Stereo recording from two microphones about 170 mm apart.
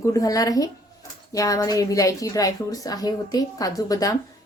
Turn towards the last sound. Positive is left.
turn(degrees=20)  # may be behind; listen again after turning